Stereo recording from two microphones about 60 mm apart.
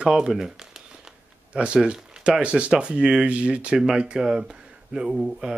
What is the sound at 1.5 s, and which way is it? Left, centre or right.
Speech, centre.